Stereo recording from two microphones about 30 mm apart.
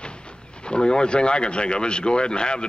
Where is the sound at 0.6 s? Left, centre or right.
Left.